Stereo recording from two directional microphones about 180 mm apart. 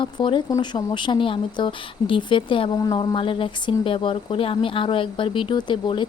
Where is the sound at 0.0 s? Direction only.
25° left (ahead or behind).